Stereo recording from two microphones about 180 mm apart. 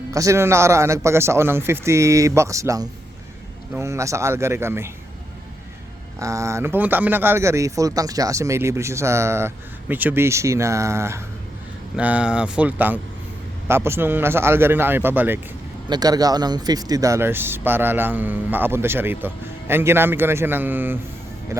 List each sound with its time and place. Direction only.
0.1 s speech: 15° right (ahead or behind)
6.1 s speech: 15° right (ahead or behind)
15.9 s speech: 20° right (ahead or behind)